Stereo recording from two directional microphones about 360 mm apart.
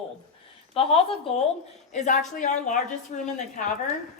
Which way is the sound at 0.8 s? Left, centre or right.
Centre.